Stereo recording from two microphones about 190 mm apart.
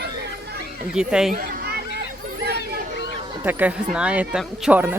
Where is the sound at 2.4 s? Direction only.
60° right (ahead or behind).